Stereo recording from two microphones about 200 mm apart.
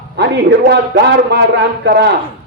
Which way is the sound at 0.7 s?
55° right (ahead or behind).